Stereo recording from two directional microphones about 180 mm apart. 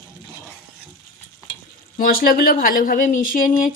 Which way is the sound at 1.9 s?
55° left (ahead or behind).